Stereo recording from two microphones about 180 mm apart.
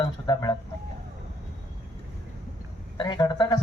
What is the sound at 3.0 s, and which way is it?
Speech, 25° left (ahead or behind).